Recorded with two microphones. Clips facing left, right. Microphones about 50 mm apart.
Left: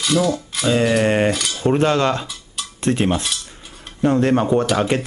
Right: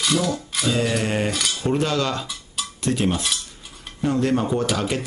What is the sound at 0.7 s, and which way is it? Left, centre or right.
Speech, left.